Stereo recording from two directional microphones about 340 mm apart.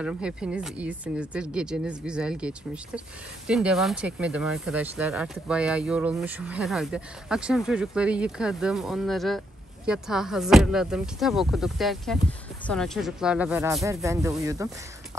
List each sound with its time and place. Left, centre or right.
0.0 s speech: centre